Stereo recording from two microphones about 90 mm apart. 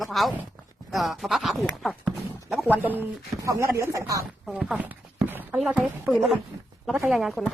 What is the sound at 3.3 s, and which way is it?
Speech, 35° right (ahead or behind).